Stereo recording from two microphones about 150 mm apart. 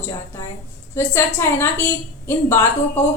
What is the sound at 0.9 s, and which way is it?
A woman's voice, 15° left (ahead or behind).